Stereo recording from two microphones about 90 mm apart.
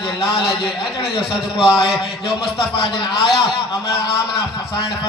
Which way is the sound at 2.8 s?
70° left (ahead or behind).